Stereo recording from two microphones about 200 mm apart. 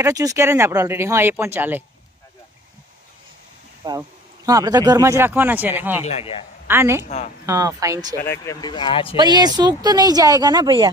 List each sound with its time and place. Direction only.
0.0 s speech: 15° right (ahead or behind)
3.8 s speech: 20° right (ahead or behind)
6.0 s speech: 30° left (ahead or behind)
6.7 s speech: 10° right (ahead or behind)
8.3 s speech: 15° left (ahead or behind)
9.1 s speech: 20° right (ahead or behind)